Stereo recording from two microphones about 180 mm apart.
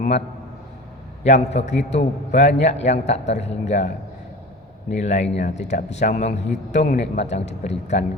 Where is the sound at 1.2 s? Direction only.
40° left (ahead or behind).